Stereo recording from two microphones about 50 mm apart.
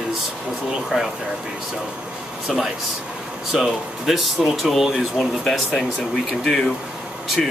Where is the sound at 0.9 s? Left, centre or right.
Centre.